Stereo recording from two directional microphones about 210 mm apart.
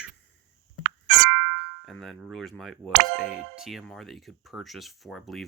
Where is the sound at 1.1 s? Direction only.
55° right (ahead or behind).